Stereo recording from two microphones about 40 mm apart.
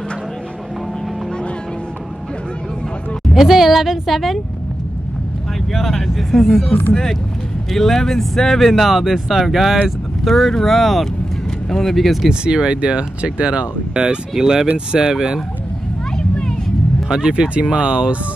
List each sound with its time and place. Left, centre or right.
3.3 s speech: centre
5.7 s speech: centre
10.2 s speech: centre
12.3 s speech: centre
14.3 s speech: centre
16.2 s a sound: centre
17.1 s speech: right